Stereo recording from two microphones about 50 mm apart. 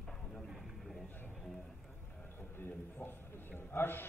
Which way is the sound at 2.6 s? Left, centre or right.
Left.